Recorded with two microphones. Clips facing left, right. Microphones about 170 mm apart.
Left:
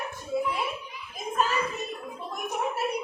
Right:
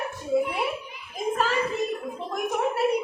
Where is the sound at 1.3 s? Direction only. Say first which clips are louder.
Right 1 dB; 90° right.